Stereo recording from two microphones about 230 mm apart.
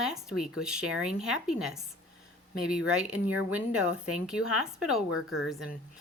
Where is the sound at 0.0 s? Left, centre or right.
Centre.